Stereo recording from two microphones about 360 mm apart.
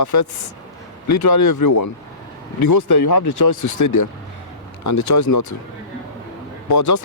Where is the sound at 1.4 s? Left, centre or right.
Left.